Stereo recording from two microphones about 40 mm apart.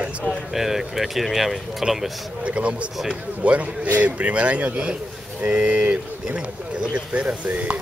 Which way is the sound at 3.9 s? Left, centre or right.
Right.